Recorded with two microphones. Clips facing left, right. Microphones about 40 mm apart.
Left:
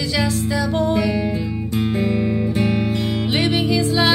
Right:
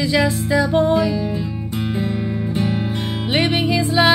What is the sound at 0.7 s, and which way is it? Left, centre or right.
Music, centre.